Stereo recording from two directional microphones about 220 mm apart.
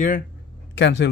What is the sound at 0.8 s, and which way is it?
Speech, 55° left (ahead or behind).